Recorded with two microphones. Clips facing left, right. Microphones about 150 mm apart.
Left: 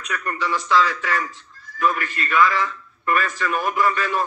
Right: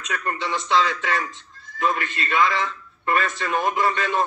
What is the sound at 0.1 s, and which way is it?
A man's voice, 25° right (ahead or behind).